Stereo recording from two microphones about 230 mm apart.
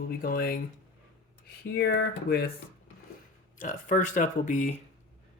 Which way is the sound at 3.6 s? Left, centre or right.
Left.